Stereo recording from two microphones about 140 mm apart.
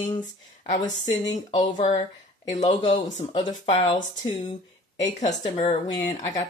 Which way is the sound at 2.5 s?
50° left (ahead or behind).